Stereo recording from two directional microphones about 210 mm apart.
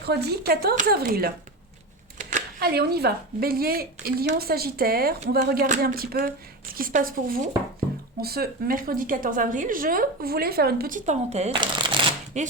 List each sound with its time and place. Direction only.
0.0 s a woman's voice: 50° right (ahead or behind); by 12.4 s 25° right (ahead or behind)